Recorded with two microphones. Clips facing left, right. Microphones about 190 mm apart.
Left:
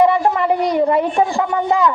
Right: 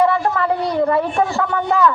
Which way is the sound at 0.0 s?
15° left (ahead or behind).